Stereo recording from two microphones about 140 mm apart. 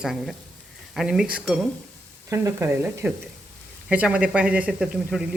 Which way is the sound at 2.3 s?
20° right (ahead or behind).